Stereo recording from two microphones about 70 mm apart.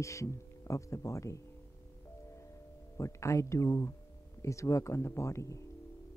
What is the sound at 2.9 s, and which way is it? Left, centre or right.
Speech, left.